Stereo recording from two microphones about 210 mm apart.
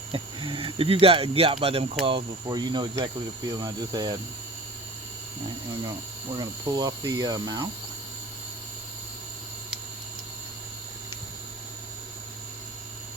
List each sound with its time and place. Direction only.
0.1 s speech: 25° right (ahead or behind)
6.3 s speech: 20° right (ahead or behind)